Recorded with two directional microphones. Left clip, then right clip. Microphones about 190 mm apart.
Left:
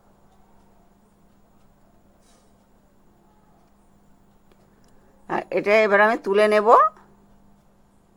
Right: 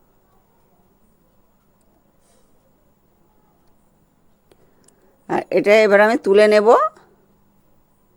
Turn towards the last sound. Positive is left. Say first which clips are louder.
# right 2 dB
turn(degrees=-35)  # may be behind; listen again after turning